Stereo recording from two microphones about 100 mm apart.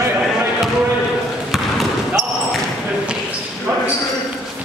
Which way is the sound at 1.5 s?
Centre (ahead or behind).